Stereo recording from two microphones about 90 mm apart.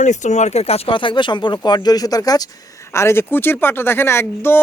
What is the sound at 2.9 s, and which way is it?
Speech, 30° left (ahead or behind).